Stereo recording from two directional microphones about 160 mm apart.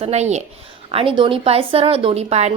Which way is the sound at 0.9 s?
35° right (ahead or behind).